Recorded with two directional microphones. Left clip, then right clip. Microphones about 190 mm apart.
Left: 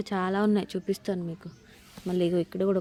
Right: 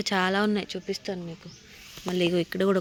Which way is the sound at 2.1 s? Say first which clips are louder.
Right 1 dB; centre (ahead or behind).